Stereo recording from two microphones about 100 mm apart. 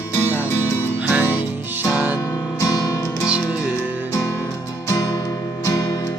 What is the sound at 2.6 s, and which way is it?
Music, 35° left (ahead or behind).